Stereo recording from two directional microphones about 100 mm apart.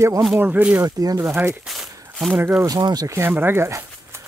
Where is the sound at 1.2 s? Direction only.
25° right (ahead or behind).